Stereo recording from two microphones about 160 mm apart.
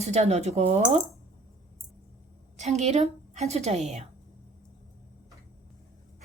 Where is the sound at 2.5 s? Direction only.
45° right (ahead or behind).